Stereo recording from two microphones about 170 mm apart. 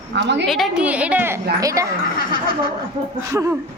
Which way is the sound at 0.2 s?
90° right.